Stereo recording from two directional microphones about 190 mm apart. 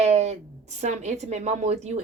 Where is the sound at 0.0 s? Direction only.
35° right (ahead or behind).